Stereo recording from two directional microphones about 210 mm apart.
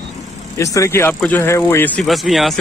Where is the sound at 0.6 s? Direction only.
15° left (ahead or behind).